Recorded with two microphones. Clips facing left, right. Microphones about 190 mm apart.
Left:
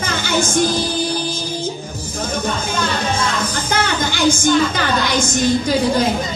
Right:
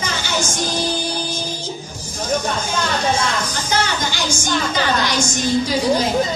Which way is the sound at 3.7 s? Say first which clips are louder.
Left 1 dB; 55° left (ahead or behind).